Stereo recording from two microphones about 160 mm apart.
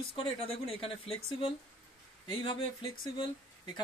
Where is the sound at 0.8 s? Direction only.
35° left (ahead or behind).